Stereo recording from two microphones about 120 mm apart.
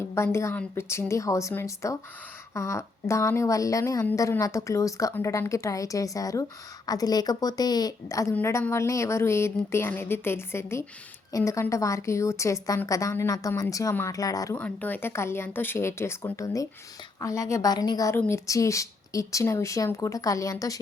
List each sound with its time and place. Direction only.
0.1 s a woman's voice: 20° left (ahead or behind)
14.6 s a woman's voice: 15° left (ahead or behind)